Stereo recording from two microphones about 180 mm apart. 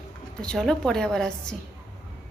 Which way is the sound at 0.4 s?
Centre (ahead or behind).